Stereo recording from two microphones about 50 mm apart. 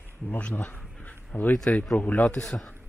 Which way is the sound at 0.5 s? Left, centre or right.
Left.